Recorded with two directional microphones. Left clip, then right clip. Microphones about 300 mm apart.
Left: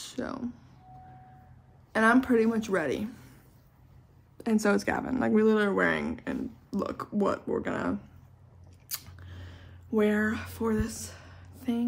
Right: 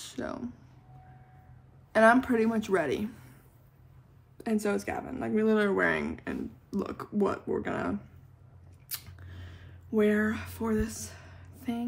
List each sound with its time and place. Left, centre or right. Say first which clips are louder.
0.0 s speech: left 1 dB; centre
1.9 s speech: right 2 dB; centre
4.6 s speech: left 5 dB; left
5.3 s speech: left 1 dB; centre
8.9 s a sound: left 2 dB; centre